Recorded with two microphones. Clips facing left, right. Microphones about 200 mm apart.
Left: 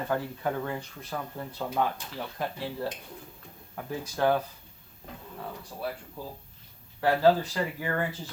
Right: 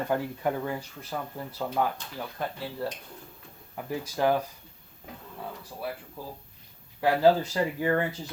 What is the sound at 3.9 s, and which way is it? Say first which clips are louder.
Speech: even; 10° right (ahead or behind).